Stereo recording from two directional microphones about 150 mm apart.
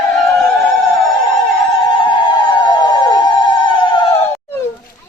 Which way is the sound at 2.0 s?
30° left (ahead or behind).